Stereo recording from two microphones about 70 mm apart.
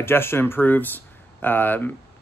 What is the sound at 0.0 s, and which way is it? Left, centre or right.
Speech, left.